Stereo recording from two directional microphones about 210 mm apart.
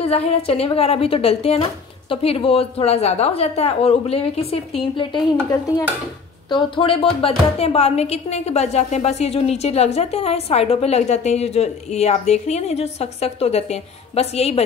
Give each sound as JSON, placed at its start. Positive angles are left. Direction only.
{"t": 0.0, "sound": "a woman's voice", "side_deg": 30}
{"t": 6.5, "sound": "a woman's voice", "side_deg": 25}